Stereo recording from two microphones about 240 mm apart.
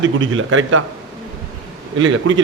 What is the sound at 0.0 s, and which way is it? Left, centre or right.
Speech, right.